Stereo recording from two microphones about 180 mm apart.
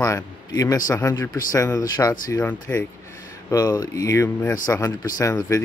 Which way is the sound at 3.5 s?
20° left (ahead or behind).